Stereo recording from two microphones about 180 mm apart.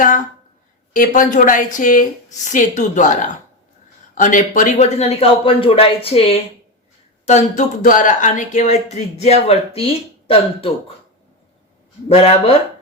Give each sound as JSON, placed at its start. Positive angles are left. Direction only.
{"t": 0.9, "sound": "a man's voice", "side_deg": 45}
{"t": 12.0, "sound": "a man's voice", "side_deg": 35}